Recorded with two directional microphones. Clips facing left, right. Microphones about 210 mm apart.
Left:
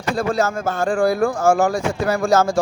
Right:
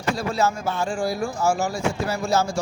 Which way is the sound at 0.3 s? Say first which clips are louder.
Left 3 dB; 50° left (ahead or behind).